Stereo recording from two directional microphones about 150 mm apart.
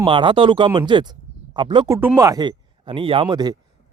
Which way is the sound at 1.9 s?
15° right (ahead or behind).